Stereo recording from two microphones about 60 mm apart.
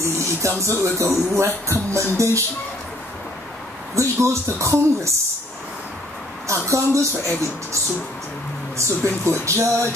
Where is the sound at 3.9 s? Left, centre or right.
Right.